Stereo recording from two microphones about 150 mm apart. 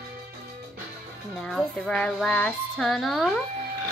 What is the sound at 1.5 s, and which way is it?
Speech, 5° left (ahead or behind).